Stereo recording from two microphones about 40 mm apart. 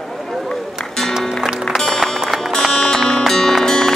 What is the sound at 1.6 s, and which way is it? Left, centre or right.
Music, centre.